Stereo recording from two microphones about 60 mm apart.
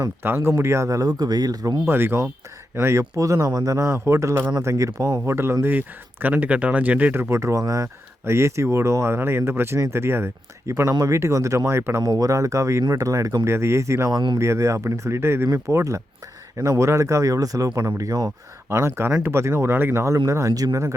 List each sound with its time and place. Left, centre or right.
0.2 s speech: right
1.9 s speech: right
2.8 s speech: right
3.8 s speech: right
5.2 s speech: right
5.6 s speech: right
7.1 s speech: right
8.2 s speech: right
11.0 s speech: right
12.0 s speech: right
15.5 s speech: right
18.7 s speech: right
20.3 s speech: right